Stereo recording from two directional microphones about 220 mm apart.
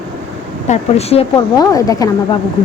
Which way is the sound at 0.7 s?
30° left (ahead or behind).